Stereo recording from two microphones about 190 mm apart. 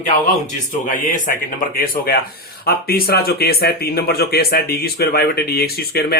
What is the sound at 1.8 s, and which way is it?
Speech, 50° left (ahead or behind).